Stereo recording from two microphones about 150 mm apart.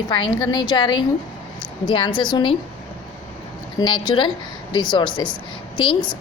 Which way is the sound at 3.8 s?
30° left (ahead or behind).